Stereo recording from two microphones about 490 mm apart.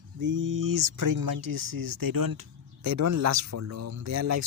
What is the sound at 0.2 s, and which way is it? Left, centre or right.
Speech, right.